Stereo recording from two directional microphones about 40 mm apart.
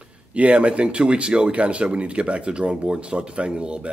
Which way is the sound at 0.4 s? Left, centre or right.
Right.